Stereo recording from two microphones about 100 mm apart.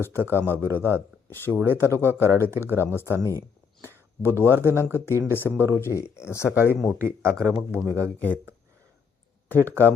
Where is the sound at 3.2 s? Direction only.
35° right (ahead or behind).